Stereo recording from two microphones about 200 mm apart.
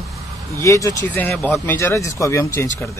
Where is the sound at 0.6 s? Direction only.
15° left (ahead or behind).